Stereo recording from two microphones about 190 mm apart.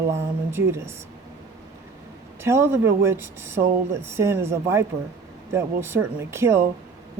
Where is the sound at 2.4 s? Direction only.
10° right (ahead or behind).